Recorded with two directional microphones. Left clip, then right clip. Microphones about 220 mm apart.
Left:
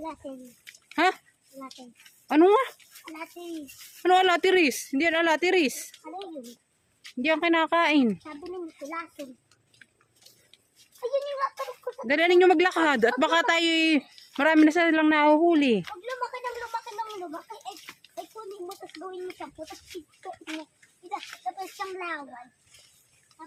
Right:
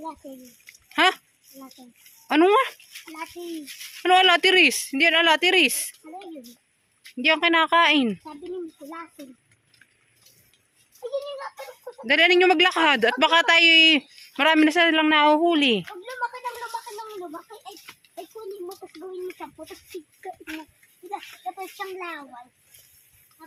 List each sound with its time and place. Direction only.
0.9 s a sound: 5° left (ahead or behind)
2.2 s speech: 5° left (ahead or behind)
4.0 s speech: 5° left (ahead or behind)
12.0 s speech: 10° left (ahead or behind)
18.8 s speech: 20° left (ahead or behind)
20.4 s speech: 5° right (ahead or behind)